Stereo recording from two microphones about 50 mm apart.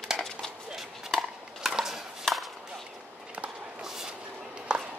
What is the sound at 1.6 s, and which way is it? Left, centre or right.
Chopping, centre.